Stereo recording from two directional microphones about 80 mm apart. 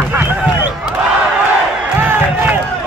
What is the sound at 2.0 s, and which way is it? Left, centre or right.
Crowd, right.